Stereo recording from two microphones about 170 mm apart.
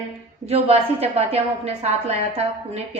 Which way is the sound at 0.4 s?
35° right (ahead or behind).